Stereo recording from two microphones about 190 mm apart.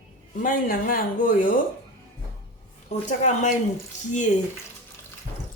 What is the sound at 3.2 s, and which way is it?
Speech, 40° left (ahead or behind).